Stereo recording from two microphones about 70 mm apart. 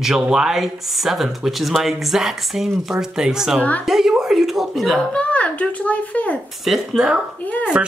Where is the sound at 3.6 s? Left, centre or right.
Left.